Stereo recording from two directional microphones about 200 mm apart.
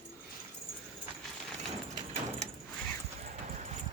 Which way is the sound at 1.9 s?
35° right (ahead or behind).